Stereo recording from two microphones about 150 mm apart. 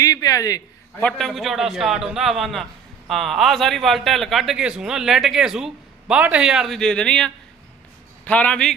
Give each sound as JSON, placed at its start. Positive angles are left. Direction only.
{"t": 0.0, "sound": "a man's voice", "side_deg": 25}
{"t": 1.0, "sound": "a man's voice", "side_deg": 0}